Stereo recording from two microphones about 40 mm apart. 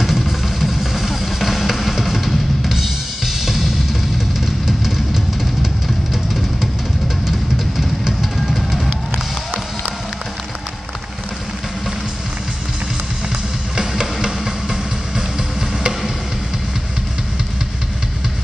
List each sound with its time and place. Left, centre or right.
0.0 s music: centre
4.6 s music: centre
7.2 s music: centre
13.7 s music: centre